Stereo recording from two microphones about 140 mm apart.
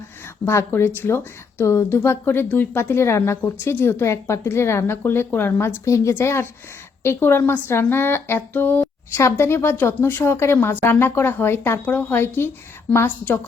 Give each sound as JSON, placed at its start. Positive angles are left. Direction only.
{"t": 0.4, "sound": "speech", "side_deg": 15}